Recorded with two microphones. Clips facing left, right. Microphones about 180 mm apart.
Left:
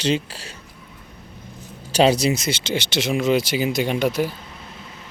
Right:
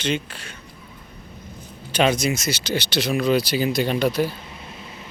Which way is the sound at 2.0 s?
30° left (ahead or behind).